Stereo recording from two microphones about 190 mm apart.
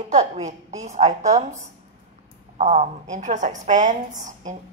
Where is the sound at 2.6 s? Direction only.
35° right (ahead or behind).